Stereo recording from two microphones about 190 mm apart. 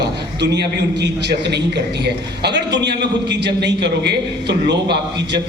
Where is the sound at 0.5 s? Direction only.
60° right (ahead or behind).